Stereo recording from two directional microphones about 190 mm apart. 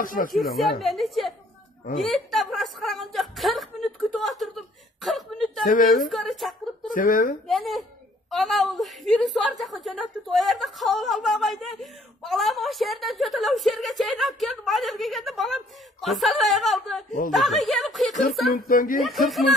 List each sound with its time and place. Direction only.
0.0 s speech: 45° left (ahead or behind)
0.7 s a man's voice: centre (ahead or behind)
2.0 s a sound: centre (ahead or behind)
6.0 s a woman's voice: centre (ahead or behind)
6.9 s speech: 45° left (ahead or behind)
7.4 s a sound: centre (ahead or behind)
8.3 s a man's voice: centre (ahead or behind)
18.7 s speech: 45° left (ahead or behind)
19.0 s a man's voice: centre (ahead or behind)